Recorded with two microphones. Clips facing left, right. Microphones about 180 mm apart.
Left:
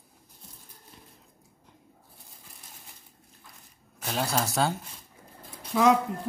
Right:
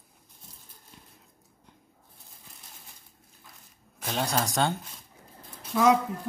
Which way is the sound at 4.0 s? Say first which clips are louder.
Even; centre (ahead or behind).